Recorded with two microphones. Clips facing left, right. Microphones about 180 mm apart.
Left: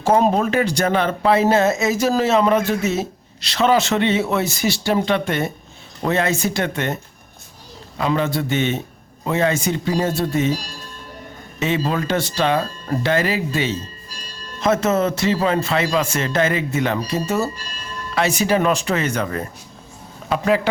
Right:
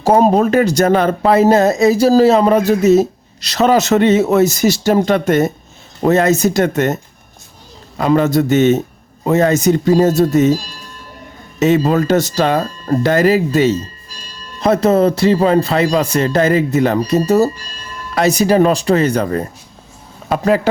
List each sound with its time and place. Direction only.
0.0 s speech: 40° right (ahead or behind)
11.6 s speech: 45° right (ahead or behind)